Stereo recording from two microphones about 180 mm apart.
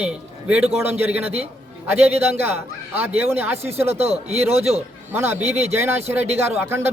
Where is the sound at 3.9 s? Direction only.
35° right (ahead or behind).